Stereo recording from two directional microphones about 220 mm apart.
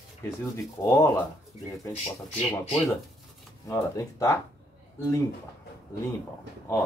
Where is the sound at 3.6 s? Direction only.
15° left (ahead or behind).